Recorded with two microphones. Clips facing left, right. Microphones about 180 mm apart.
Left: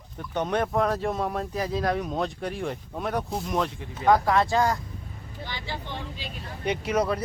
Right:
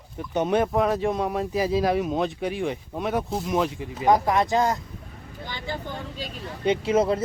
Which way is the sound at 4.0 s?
20° right (ahead or behind).